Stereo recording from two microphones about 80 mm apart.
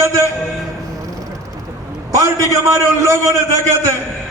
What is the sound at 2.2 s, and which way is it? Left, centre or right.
A man's voice, right.